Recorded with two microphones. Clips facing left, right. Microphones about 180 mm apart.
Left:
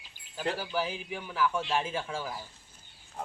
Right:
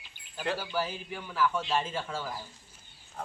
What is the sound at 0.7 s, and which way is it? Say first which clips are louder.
Speech: left 1 dB; 10° left (ahead or behind).